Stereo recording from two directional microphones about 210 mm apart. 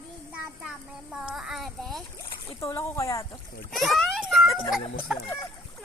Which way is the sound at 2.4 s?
15° left (ahead or behind).